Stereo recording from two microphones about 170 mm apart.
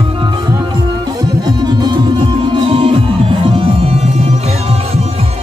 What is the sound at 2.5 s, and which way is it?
Music, 35° right (ahead or behind).